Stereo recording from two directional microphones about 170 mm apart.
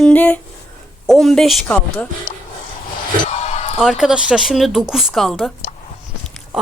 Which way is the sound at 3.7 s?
Centre (ahead or behind).